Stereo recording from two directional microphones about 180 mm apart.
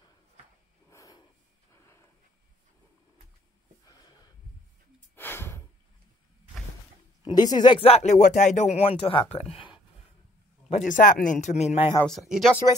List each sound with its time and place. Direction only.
0.8 s snort: 20° left (ahead or behind)
5.1 s snort: 10° left (ahead or behind)
7.2 s speech: 25° left (ahead or behind)
10.9 s speech: 50° left (ahead or behind); by 11.9 s 35° left (ahead or behind)
12.1 s speech: centre (ahead or behind)